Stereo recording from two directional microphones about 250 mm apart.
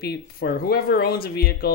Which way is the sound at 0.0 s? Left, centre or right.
Left.